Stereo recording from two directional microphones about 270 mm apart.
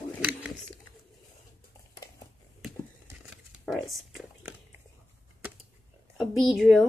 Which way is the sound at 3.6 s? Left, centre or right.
Centre.